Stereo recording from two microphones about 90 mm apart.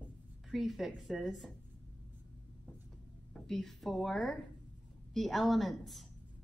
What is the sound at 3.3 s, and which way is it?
A woman's voice, 5° left (ahead or behind).